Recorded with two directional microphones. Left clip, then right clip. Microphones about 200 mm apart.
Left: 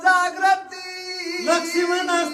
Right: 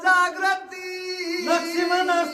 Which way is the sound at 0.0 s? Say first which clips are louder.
Left 2 dB; 20° right (ahead or behind).